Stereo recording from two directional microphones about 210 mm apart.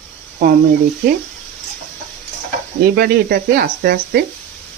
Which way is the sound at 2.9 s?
45° right (ahead or behind).